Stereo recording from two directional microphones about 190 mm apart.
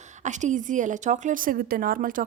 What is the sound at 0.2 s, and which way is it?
A woman's voice, 40° right (ahead or behind).